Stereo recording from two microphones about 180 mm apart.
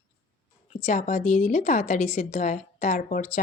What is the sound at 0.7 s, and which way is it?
A woman's voice, 40° left (ahead or behind).